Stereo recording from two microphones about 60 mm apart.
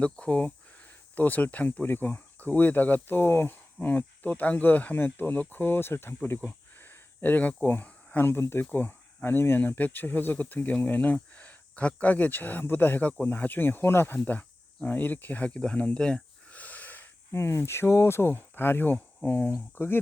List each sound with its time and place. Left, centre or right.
0.0 s speech: centre
16.0 s a sound: centre
16.6 s wheeze: left
17.3 s speech: left